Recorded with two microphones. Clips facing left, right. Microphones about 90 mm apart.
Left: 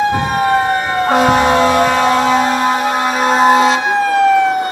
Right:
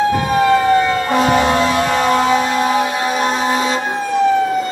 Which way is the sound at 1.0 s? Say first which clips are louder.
Left 3 dB; 55° left (ahead or behind).